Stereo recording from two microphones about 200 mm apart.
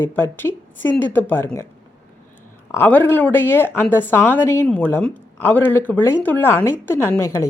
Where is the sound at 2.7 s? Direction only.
10° left (ahead or behind).